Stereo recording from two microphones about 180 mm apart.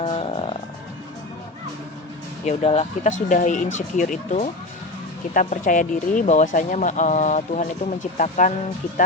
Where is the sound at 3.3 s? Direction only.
45° left (ahead or behind).